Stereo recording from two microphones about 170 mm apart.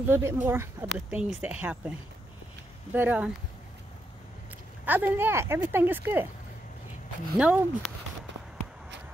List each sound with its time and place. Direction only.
0.1 s speech: 15° right (ahead or behind)
4.8 s speech: 10° right (ahead or behind)
7.3 s speech: 5° right (ahead or behind)